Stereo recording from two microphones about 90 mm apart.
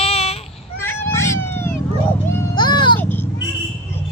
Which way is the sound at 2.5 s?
55° left (ahead or behind).